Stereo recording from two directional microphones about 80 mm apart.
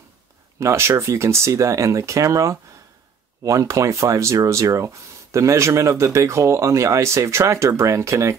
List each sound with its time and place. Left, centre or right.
0.6 s speech: right